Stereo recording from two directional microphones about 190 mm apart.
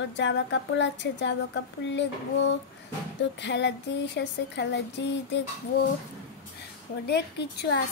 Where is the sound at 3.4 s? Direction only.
65° left (ahead or behind).